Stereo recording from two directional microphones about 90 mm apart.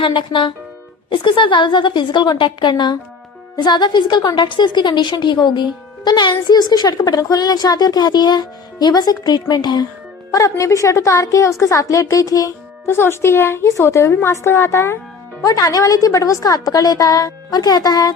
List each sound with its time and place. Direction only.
0.0 s a woman's voice: 65° left (ahead or behind)
10.3 s a woman's voice: 35° left (ahead or behind)
12.8 s a woman's voice: 25° left (ahead or behind); by 18.1 s 45° left (ahead or behind)